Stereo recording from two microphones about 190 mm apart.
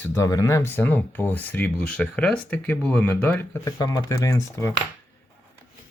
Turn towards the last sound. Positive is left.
turn(degrees=15)  # may be behind; listen again after turning